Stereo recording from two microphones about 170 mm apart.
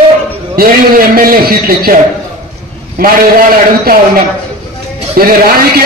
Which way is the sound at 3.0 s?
60° right (ahead or behind).